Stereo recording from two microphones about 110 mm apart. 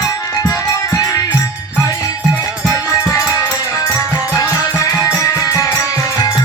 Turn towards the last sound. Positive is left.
turn(degrees=25)  # may be behind; listen again after turning